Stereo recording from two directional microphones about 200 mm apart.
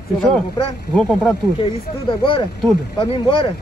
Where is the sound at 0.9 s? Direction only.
Centre (ahead or behind).